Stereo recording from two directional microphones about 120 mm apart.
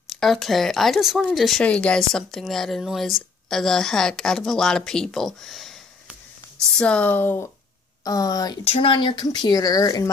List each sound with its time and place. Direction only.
0.1 s speech: centre (ahead or behind)
6.7 s speech: 5° left (ahead or behind)
8.0 s speech: 30° left (ahead or behind)
8.6 s speech: 50° left (ahead or behind); by 10.0 s 30° left (ahead or behind)